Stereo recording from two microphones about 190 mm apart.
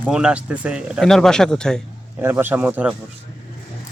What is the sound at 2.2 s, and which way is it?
Speech, 10° right (ahead or behind).